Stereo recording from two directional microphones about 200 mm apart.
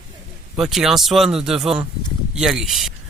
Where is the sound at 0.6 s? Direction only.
Centre (ahead or behind).